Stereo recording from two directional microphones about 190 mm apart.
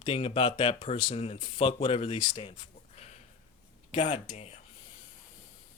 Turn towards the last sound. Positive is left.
turn(degrees=35)  # may be behind; listen again after turning